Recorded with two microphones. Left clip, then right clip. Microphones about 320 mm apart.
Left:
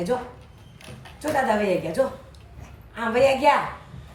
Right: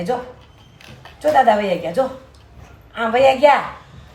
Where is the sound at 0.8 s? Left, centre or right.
Right.